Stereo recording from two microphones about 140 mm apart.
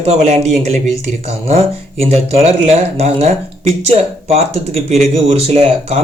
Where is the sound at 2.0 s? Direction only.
50° right (ahead or behind).